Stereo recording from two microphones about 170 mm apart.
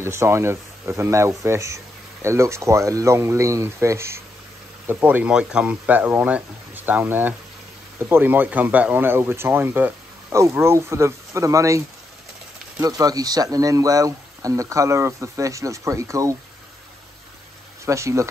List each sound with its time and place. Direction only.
0.0 s speech: 15° right (ahead or behind)
12.8 s speech: 20° right (ahead or behind)
17.8 s speech: 15° right (ahead or behind)